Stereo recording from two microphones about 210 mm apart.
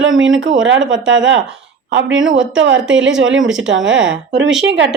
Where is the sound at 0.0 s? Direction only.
65° right (ahead or behind).